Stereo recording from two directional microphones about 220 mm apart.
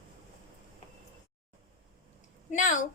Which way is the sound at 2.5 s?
35° left (ahead or behind).